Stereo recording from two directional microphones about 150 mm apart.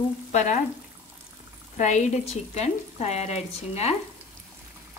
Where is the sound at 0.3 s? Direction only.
50° left (ahead or behind).